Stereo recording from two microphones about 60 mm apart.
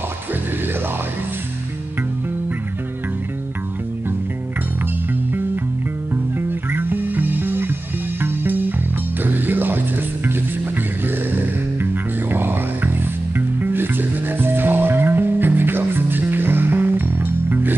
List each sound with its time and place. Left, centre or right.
6.7 s music: right